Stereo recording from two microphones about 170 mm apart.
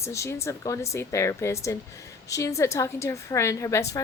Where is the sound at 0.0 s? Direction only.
15° left (ahead or behind).